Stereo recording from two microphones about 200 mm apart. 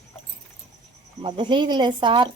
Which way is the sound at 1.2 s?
25° right (ahead or behind).